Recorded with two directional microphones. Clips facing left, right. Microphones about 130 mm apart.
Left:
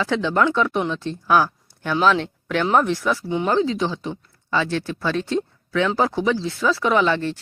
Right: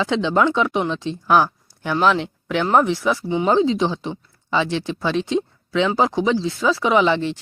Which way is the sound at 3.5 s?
20° right (ahead or behind).